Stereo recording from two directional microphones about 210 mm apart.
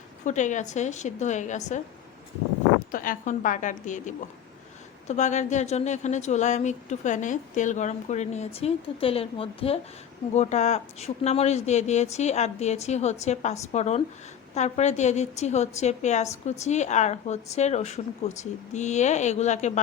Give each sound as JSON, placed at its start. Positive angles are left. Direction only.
{"t": 0.3, "sound": "speech", "side_deg": 35}
{"t": 2.9, "sound": "speech", "side_deg": 40}